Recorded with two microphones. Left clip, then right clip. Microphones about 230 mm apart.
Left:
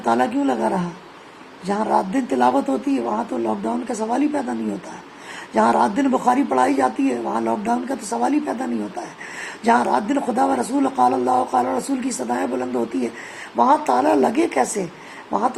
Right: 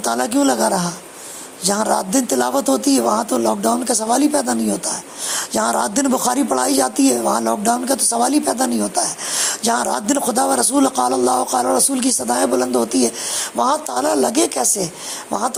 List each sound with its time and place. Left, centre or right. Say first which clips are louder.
0.0 s speech: right 1 dB; right
5.5 s speech: left 2 dB; right
9.6 s speech: left 3 dB; right